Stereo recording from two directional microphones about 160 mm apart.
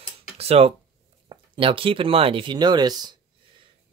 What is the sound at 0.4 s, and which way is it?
Speech, 40° right (ahead or behind).